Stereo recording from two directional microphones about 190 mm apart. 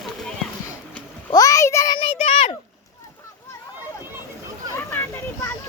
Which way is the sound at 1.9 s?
30° left (ahead or behind).